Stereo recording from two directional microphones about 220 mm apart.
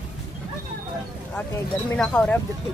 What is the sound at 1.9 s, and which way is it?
Speech, 5° left (ahead or behind).